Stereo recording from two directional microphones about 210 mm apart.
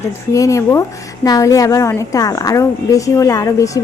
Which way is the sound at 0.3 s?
15° left (ahead or behind).